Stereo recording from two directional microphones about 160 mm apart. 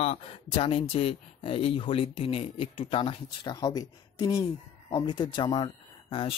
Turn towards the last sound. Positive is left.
turn(degrees=35)  # may be behind; listen again after turning